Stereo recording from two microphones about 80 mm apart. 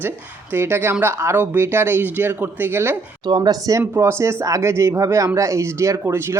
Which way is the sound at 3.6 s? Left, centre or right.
Right.